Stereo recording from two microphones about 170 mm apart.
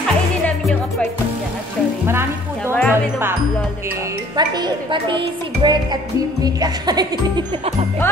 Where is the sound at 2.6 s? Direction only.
10° left (ahead or behind).